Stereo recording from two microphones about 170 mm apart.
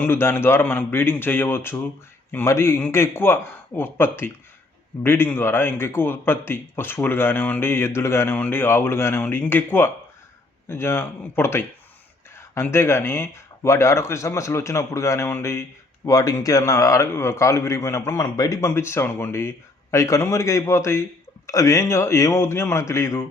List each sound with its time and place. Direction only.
0.0 s a man's voice: 15° left (ahead or behind)